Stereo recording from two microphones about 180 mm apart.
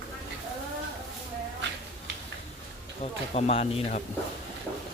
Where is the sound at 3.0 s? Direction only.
35° left (ahead or behind).